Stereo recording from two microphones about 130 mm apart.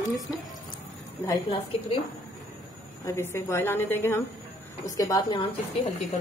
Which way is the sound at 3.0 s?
20° left (ahead or behind).